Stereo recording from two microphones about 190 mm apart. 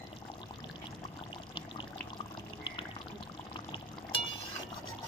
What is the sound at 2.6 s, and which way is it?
Pour, 25° left (ahead or behind).